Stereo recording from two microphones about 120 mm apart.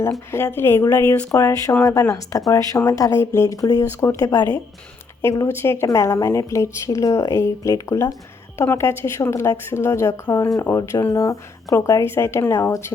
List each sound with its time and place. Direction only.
0.3 s a woman's voice: 20° left (ahead or behind)